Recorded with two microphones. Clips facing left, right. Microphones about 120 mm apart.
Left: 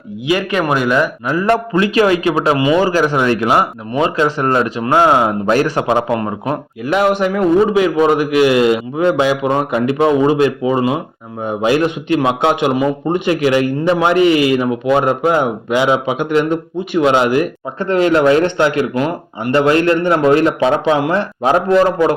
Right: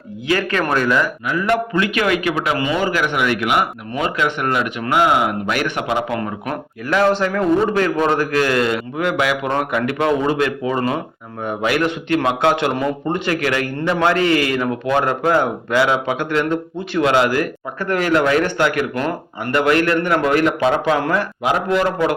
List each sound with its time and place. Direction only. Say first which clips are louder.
0.3 s speech: left 3 dB; 15° left (ahead or behind)
1.3 s a man's voice: left 4 dB; 35° left (ahead or behind)